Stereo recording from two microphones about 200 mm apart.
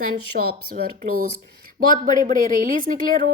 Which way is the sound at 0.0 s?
50° right (ahead or behind).